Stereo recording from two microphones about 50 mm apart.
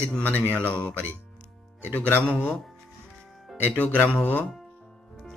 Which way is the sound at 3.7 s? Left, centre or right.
Left.